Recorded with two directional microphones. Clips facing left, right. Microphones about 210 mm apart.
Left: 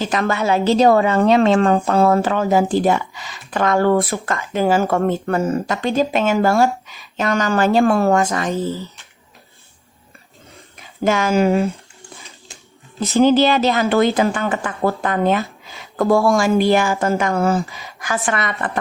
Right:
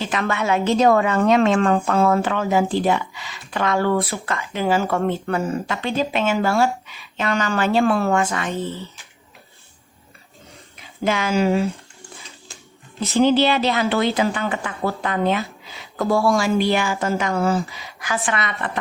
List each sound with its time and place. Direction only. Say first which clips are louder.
0.0 s a woman's voice: left 3 dB; 40° left (ahead or behind)
8.5 s speech: left 4 dB; centre (ahead or behind)
10.8 s speech: left 4 dB; 45° left (ahead or behind)
11.5 s speech: left 3 dB; centre (ahead or behind)
13.0 s speech: left 3 dB; 45° left (ahead or behind)